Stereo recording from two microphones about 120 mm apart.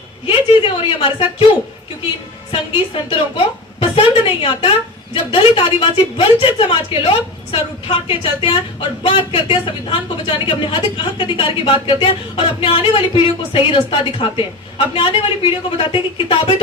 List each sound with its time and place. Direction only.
0.3 s speech: 45° left (ahead or behind)
2.5 s speech: 45° left (ahead or behind)